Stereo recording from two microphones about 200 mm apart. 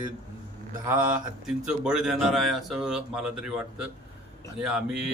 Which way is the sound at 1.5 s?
5° right (ahead or behind).